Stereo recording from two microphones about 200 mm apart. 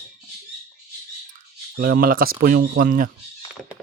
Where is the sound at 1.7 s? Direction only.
45° right (ahead or behind).